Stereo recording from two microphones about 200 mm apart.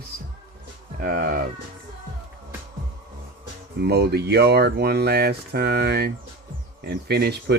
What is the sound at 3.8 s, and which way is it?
Speech, 55° right (ahead or behind).